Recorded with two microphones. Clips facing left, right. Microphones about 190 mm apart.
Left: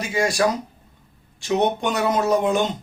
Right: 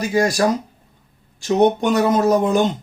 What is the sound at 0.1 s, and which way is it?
Speech, 35° right (ahead or behind).